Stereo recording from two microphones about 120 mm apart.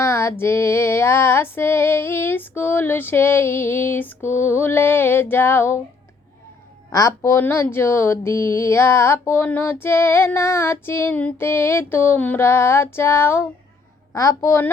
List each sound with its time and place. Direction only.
0.0 s speech: 20° left (ahead or behind)
6.9 s speech: 25° left (ahead or behind)